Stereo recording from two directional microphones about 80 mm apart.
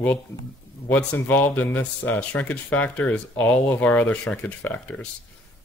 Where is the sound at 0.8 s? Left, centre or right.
Left.